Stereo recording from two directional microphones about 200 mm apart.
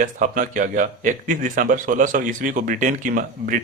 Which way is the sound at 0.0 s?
40° right (ahead or behind).